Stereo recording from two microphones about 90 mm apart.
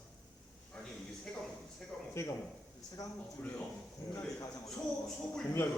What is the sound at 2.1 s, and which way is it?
Speech, 35° left (ahead or behind).